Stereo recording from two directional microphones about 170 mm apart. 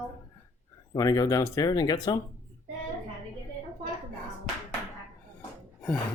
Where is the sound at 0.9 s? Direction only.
20° left (ahead or behind).